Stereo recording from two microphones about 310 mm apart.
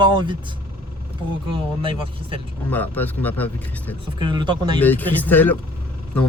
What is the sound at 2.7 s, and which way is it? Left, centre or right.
Speech, centre.